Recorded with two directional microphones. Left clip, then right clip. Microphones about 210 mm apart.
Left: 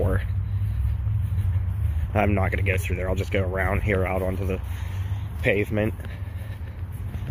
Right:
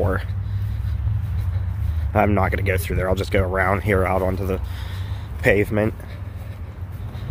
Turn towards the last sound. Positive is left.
turn(degrees=-10)  # may be behind; listen again after turning